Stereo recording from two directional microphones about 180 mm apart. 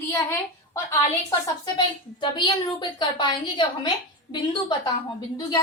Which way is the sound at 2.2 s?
25° left (ahead or behind).